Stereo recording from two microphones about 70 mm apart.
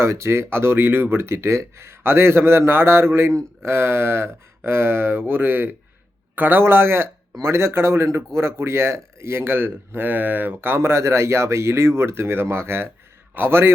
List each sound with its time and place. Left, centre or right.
0.0 s speech: right